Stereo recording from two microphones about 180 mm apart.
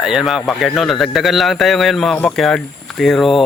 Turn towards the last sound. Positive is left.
turn(degrees=0)  # may be behind; listen again after turning